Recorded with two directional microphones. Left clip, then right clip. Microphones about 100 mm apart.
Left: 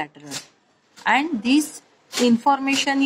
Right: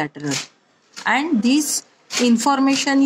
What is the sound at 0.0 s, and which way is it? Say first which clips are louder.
A woman's voice: right 7 dB; 30° right (ahead or behind).